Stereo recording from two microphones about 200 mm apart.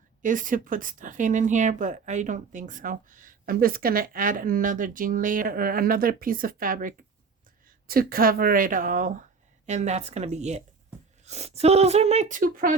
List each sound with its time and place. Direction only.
0.2 s speech: 40° right (ahead or behind)